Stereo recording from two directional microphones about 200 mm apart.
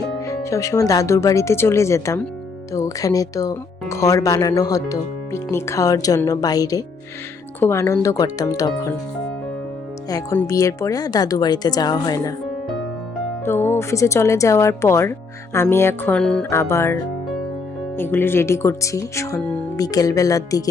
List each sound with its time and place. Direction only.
0.3 s speech: 15° left (ahead or behind)
10.1 s speech: 15° left (ahead or behind)
13.4 s speech: 10° left (ahead or behind)